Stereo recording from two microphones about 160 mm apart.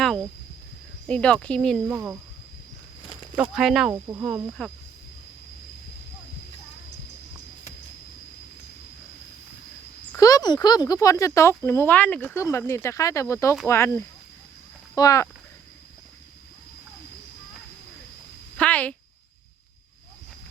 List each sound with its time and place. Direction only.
0.0 s speech: centre (ahead or behind)
1.9 s speech: 10° right (ahead or behind)
3.3 s speech: 5° right (ahead or behind)
3.9 s speech: 15° right (ahead or behind)
4.6 s speech: 5° left (ahead or behind)
10.2 s speech: 20° left (ahead or behind)
18.5 s a sound: 10° left (ahead or behind)